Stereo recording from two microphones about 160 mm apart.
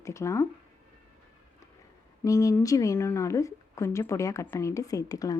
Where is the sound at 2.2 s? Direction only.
20° left (ahead or behind).